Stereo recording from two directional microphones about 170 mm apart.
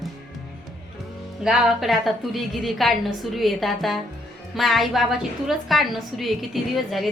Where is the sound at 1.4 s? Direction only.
Centre (ahead or behind).